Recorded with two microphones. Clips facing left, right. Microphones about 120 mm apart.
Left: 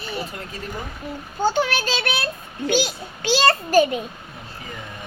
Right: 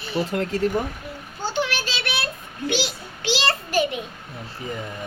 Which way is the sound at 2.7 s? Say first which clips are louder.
Left 5 dB; 45° left (ahead or behind).